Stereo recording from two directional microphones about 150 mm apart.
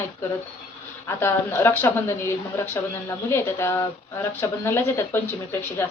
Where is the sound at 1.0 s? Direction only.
15° left (ahead or behind).